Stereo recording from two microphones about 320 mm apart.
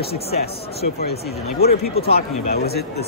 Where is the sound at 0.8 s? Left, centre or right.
Left.